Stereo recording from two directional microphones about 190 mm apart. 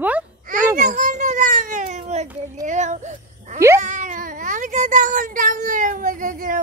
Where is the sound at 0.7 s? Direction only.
40° right (ahead or behind).